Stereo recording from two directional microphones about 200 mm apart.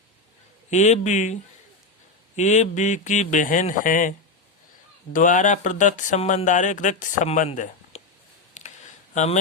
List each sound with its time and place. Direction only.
0.7 s speech: 35° left (ahead or behind)
5.1 s speech: 40° left (ahead or behind)
9.1 s speech: 35° left (ahead or behind)